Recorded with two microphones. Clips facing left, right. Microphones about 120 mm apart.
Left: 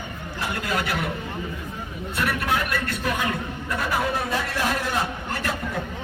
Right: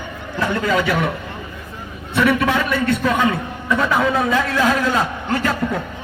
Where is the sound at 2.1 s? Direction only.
90° right.